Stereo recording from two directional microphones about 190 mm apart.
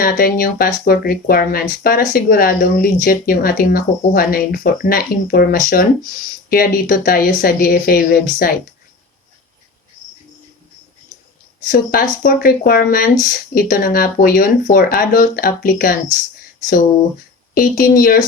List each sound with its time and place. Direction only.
0.0 s speech: 50° left (ahead or behind)
11.7 s speech: 50° left (ahead or behind)
17.5 s speech: 45° left (ahead or behind)